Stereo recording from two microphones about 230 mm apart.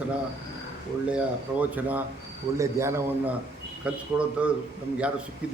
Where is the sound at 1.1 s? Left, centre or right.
Centre.